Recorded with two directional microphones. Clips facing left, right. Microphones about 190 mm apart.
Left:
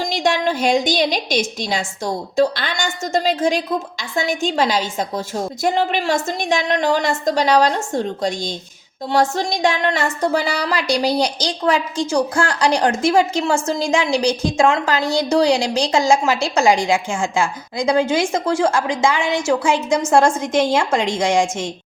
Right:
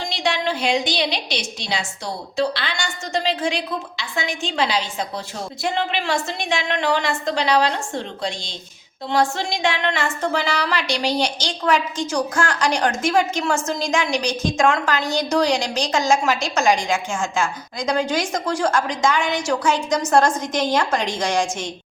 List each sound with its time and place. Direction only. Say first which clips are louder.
0.0 s a woman's voice: left 5 dB; 45° left (ahead or behind)
17.9 s a woman's voice: left 4 dB; 25° left (ahead or behind)